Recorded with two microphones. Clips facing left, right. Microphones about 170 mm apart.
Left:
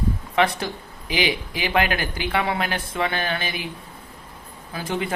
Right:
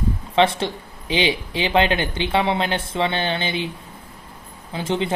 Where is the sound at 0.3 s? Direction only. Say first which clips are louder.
Right 4 dB; 25° right (ahead or behind).